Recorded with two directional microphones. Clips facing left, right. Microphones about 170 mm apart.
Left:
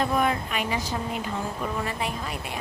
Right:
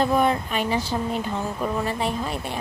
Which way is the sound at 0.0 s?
30° right (ahead or behind).